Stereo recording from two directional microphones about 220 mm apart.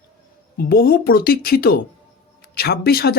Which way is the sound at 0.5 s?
45° left (ahead or behind).